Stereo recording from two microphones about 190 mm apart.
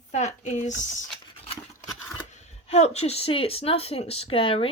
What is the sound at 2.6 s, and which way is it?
Speech, 35° left (ahead or behind).